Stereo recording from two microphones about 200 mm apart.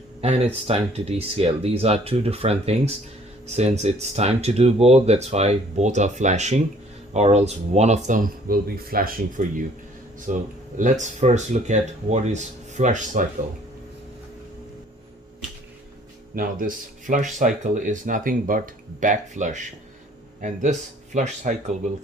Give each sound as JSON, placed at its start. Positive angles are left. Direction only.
{"t": 0.2, "sound": "speech", "side_deg": -30}
{"t": 16.3, "sound": "speech", "side_deg": -45}